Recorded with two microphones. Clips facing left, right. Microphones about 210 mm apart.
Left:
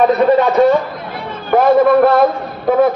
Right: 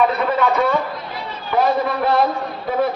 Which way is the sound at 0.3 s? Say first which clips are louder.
Left 8 dB; 40° left (ahead or behind).